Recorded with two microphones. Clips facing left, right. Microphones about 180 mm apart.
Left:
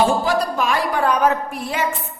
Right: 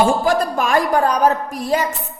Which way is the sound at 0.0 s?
50° right (ahead or behind).